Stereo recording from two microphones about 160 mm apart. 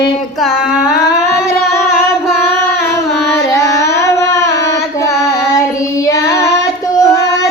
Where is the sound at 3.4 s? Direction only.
20° left (ahead or behind).